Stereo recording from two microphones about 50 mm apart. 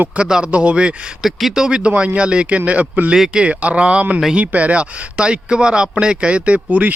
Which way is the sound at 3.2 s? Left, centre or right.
Centre.